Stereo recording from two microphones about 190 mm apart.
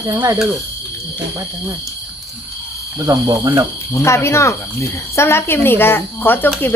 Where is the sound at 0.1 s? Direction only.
15° right (ahead or behind).